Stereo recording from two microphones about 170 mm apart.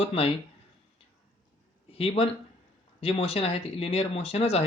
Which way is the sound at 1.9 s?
35° left (ahead or behind).